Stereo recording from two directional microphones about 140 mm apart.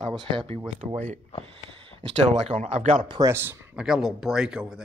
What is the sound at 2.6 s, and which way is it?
Speech, 60° right (ahead or behind).